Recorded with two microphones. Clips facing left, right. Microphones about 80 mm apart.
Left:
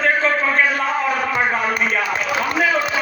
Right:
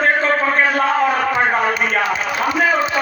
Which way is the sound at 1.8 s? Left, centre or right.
Right.